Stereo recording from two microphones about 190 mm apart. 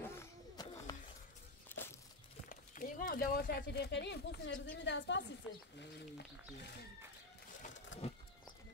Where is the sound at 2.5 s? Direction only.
45° left (ahead or behind).